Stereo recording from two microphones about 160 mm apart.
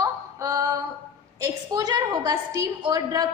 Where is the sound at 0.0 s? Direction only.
20° right (ahead or behind).